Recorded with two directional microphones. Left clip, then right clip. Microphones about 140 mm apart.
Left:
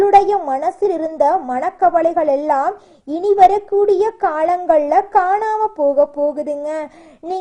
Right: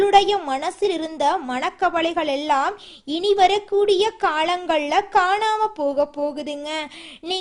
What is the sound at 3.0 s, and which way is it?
Speech, 5° right (ahead or behind).